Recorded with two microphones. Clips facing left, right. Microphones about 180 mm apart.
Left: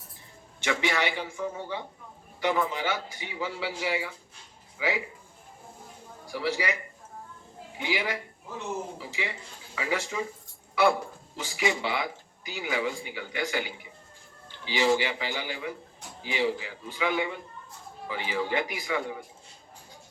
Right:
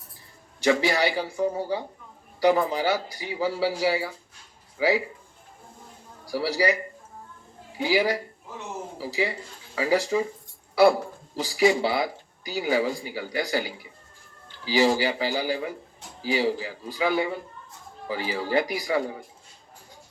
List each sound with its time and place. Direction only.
0.6 s speech: 35° right (ahead or behind)
6.2 s a man's voice: 35° right (ahead or behind)
7.8 s speech: 35° right (ahead or behind)